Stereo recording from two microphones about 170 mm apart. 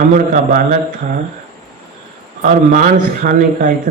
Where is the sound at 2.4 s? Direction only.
50° right (ahead or behind).